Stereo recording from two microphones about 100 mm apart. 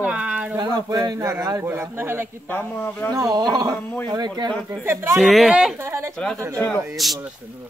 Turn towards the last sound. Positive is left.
turn(degrees=0)  # may be behind; listen again after turning